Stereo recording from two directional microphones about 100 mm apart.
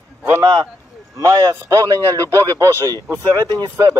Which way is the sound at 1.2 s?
40° right (ahead or behind).